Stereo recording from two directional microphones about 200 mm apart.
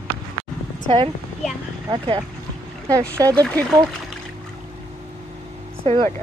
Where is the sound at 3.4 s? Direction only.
5° left (ahead or behind).